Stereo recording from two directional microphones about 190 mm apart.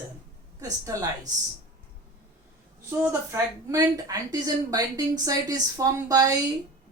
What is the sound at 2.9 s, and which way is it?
A woman's voice, 10° right (ahead or behind).